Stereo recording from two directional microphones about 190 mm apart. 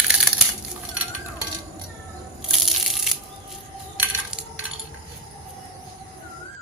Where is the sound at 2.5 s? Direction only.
Centre (ahead or behind).